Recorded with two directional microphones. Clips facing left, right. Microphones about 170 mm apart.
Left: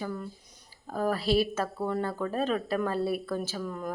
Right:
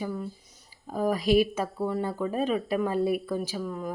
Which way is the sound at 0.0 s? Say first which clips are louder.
Right 2 dB; 5° right (ahead or behind).